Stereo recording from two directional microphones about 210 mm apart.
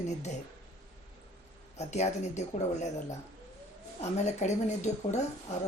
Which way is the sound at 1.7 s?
30° left (ahead or behind).